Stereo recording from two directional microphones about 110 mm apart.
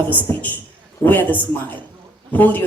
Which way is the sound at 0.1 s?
15° left (ahead or behind).